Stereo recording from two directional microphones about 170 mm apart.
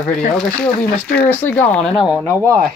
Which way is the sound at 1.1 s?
10° left (ahead or behind).